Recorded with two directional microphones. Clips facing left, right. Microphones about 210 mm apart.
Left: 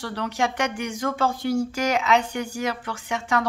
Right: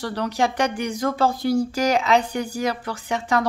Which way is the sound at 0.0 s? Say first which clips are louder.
Right 3 dB; 40° right (ahead or behind).